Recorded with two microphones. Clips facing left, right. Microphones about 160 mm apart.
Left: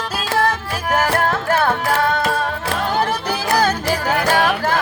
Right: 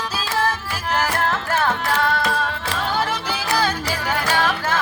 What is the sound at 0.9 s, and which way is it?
Music, 55° left (ahead or behind).